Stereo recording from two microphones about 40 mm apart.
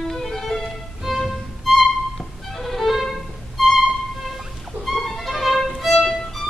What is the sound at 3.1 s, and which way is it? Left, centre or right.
Music, centre.